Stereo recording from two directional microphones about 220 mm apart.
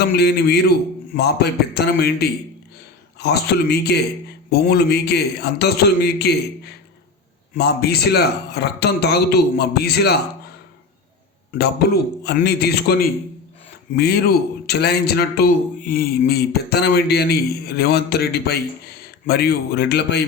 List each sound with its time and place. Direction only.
0.0 s a man's voice: 45° left (ahead or behind)
7.5 s a man's voice: 50° left (ahead or behind)
12.2 s a man's voice: 45° left (ahead or behind)